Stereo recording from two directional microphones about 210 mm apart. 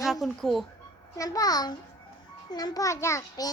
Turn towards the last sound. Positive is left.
turn(degrees=15)  # may be behind; listen again after turning